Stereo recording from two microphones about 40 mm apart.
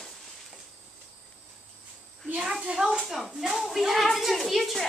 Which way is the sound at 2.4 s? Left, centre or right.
Centre.